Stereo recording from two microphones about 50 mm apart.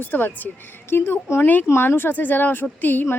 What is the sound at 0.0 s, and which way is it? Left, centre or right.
A woman's voice, left.